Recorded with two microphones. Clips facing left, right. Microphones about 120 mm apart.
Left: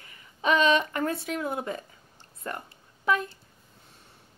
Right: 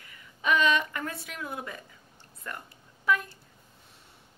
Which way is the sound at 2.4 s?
30° left (ahead or behind).